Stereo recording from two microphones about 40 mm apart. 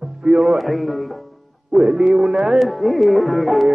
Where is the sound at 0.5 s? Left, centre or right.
Centre.